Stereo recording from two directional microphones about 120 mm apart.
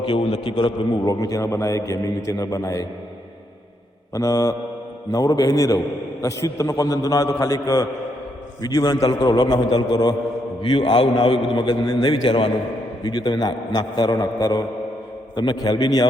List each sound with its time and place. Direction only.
0.0 s a man's voice: 40° left (ahead or behind)
4.1 s a man's voice: 25° left (ahead or behind)